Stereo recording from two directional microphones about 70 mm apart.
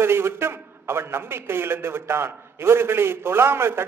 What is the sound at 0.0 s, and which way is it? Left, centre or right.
A man's voice, right.